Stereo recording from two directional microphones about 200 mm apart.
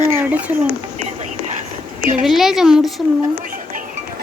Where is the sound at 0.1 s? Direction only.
10° right (ahead or behind).